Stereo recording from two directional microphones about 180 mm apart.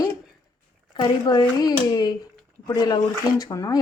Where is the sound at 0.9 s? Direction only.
25° left (ahead or behind).